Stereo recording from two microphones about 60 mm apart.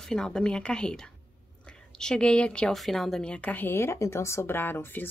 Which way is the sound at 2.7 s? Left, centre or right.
Centre.